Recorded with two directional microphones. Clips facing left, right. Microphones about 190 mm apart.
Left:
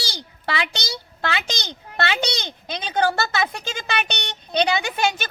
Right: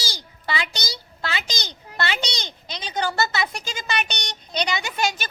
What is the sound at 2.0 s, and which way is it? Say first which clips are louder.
Speech: left 4 dB; 60° left (ahead or behind).